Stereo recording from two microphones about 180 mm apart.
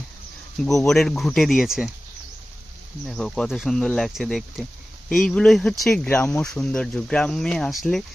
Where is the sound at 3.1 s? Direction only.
Centre (ahead or behind).